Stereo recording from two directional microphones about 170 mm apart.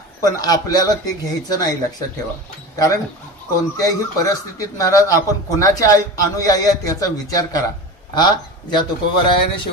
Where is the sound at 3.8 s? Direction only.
20° left (ahead or behind).